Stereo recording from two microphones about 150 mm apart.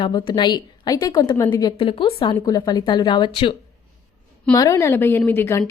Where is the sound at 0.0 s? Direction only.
35° left (ahead or behind).